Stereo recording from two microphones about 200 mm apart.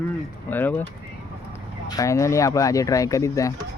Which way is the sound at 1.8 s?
15° left (ahead or behind).